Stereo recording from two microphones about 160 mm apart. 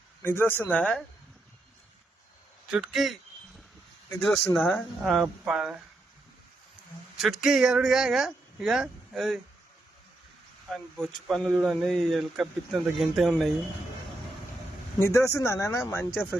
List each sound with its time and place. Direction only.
0.2 s speech: 15° left (ahead or behind)
2.6 s speech: 5° right (ahead or behind)
4.2 s speech: centre (ahead or behind)
7.2 s speech: centre (ahead or behind)
10.7 s speech: centre (ahead or behind)
14.9 s speech: 15° left (ahead or behind)